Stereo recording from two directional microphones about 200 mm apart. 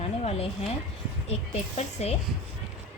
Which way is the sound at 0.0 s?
30° left (ahead or behind).